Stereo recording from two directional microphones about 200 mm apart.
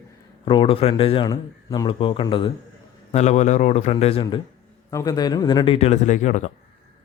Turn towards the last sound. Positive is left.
turn(degrees=40)  # may be behind; listen again after turning